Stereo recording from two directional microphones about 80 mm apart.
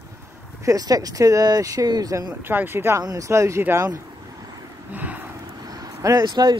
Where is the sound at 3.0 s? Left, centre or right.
Right.